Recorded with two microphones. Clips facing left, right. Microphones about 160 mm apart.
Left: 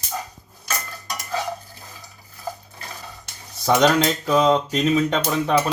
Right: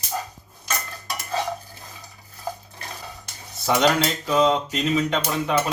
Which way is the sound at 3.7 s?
40° left (ahead or behind).